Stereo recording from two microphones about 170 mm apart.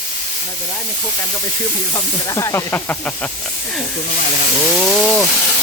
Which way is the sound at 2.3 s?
20° left (ahead or behind).